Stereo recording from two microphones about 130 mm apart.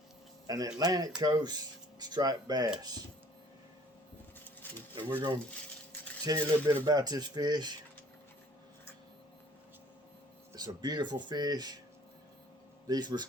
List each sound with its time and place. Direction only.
0.4 s speech: 30° right (ahead or behind)
4.6 s a sound: 15° left (ahead or behind)
5.1 s speech: 35° right (ahead or behind)
10.5 s speech: 30° right (ahead or behind)
12.9 s speech: 35° right (ahead or behind)